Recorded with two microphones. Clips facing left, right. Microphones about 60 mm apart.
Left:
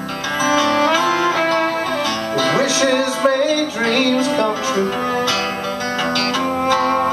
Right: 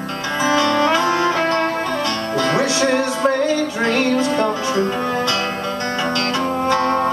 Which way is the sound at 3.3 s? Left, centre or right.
Left.